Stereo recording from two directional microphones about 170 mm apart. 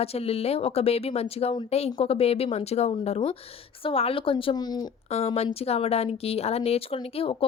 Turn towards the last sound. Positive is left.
turn(degrees=35)  # may be behind; listen again after turning